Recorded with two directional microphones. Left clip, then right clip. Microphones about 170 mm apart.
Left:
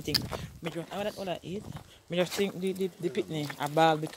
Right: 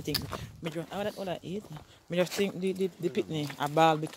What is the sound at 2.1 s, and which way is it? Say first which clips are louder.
Speech: even; 25° right (ahead or behind).